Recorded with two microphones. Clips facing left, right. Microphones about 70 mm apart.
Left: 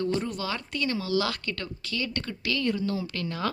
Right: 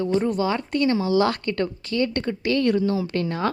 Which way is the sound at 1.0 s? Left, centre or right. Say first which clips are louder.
Right 7 dB; right.